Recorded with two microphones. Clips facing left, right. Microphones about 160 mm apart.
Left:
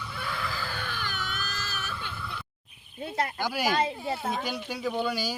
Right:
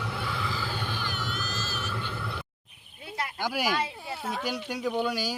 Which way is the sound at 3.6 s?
45° left (ahead or behind).